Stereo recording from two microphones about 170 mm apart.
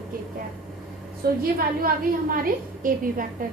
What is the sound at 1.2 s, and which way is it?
A woman's voice, 65° right (ahead or behind).